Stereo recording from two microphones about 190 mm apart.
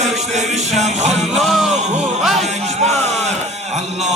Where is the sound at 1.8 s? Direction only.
40° right (ahead or behind).